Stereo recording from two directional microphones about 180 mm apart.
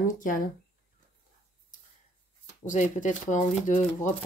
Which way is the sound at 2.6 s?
45° left (ahead or behind).